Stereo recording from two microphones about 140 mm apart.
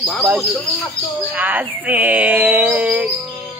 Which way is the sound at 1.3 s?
10° right (ahead or behind).